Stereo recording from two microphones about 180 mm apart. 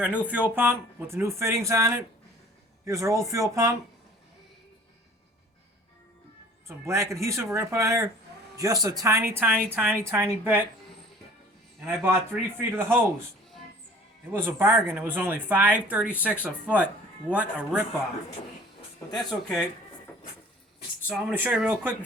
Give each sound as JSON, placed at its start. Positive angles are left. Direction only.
{"t": 0.0, "sound": "speech", "side_deg": -10}
{"t": 6.7, "sound": "a man's voice", "side_deg": -15}
{"t": 11.9, "sound": "speech", "side_deg": -10}
{"t": 14.3, "sound": "speech", "side_deg": -15}
{"t": 19.1, "sound": "speech", "side_deg": 0}
{"t": 21.1, "sound": "speech", "side_deg": -10}